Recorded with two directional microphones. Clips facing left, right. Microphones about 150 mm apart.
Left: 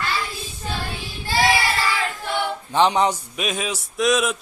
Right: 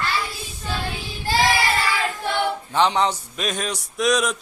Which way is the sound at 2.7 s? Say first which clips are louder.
Left 3 dB; 15° left (ahead or behind).